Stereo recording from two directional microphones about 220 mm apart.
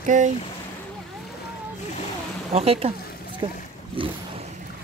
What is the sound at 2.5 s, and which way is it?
Speech, 25° right (ahead or behind).